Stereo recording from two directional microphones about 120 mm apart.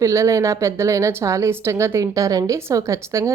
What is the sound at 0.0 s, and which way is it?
A woman's voice, 25° right (ahead or behind).